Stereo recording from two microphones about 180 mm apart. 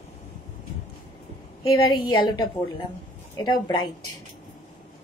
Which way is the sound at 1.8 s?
25° left (ahead or behind).